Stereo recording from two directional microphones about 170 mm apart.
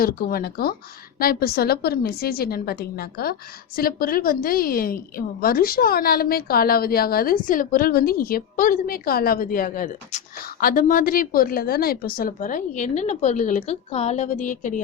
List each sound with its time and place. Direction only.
0.0 s a woman's voice: 60° left (ahead or behind)